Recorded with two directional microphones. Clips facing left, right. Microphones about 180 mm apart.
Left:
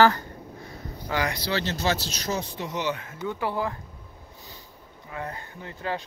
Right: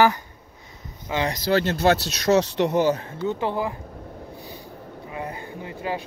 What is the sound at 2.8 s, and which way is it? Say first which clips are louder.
Speech: right 8 dB; 35° right (ahead or behind).